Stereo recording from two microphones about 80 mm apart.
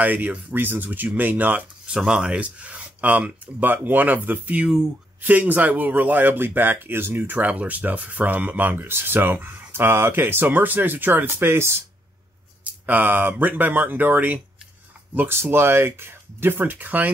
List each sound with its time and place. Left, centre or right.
0.0 s speech: right
12.8 s speech: right